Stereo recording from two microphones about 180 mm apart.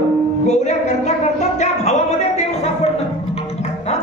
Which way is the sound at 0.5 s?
40° left (ahead or behind).